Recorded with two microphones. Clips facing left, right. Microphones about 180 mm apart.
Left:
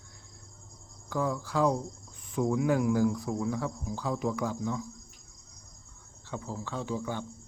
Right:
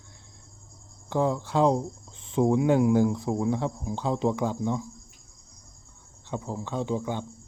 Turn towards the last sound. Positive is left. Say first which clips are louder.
# right 5 dB
turn(degrees=-20)  # may be behind; listen again after turning